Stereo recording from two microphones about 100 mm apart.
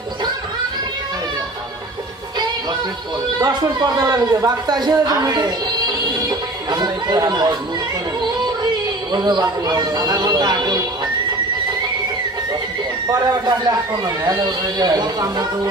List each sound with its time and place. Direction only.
3.3 s a man's voice: 40° right (ahead or behind)
6.7 s chatter: 45° right (ahead or behind)
9.1 s a sound: 45° right (ahead or behind)
13.1 s speech: 40° right (ahead or behind)